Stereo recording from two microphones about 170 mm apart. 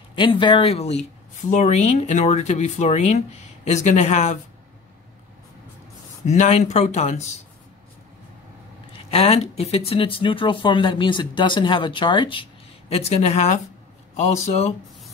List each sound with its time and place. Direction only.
0.1 s speech: 30° left (ahead or behind)
6.2 s speech: 45° left (ahead or behind)
8.9 s speech: 35° left (ahead or behind)